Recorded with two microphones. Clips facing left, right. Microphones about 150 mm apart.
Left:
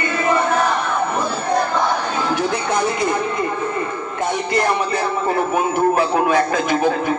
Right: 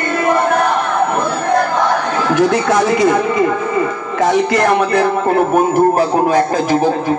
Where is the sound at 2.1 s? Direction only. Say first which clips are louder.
Right 7 dB; 90° right.